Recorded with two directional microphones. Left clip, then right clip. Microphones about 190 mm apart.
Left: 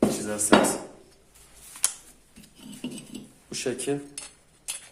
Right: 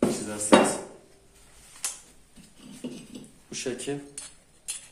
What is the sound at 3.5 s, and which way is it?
Speech, 20° left (ahead or behind).